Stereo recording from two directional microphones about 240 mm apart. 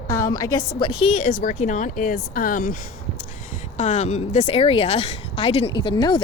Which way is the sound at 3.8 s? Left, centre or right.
Left.